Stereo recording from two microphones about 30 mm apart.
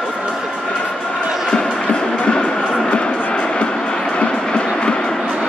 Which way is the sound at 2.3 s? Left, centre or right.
Left.